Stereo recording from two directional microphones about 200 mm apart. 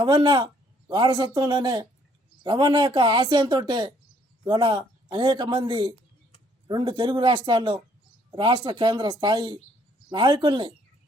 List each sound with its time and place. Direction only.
0.0 s a man's voice: 25° right (ahead or behind)